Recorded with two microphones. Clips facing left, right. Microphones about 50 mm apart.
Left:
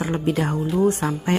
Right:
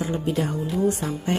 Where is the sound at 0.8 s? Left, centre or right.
Left.